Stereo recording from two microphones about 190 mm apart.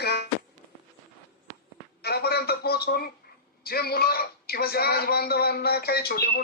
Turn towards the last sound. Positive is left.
turn(degrees=55)  # may be behind; listen again after turning